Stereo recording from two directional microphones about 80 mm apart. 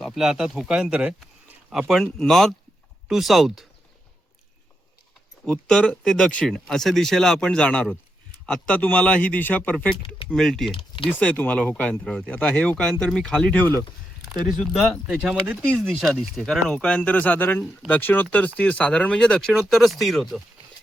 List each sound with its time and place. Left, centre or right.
0.0 s speech: centre
1.9 s speech: centre
5.5 s a man's voice: centre
10.3 s speech: centre
10.7 s speech: left
11.2 s speech: centre
13.5 s a man's voice: left
14.3 s speech: centre
15.1 s speech: centre
15.8 s speech: centre
19.5 s speech: centre